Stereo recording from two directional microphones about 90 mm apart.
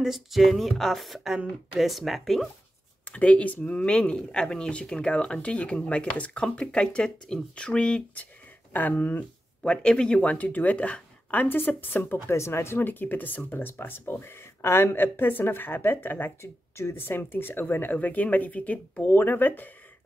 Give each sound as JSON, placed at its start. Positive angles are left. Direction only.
{"t": 0.0, "sound": "speech", "side_deg": -5}
{"t": 3.1, "sound": "speech", "side_deg": 15}